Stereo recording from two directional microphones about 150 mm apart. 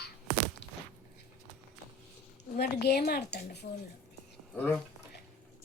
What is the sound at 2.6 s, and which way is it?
A woman's voice, 90° left.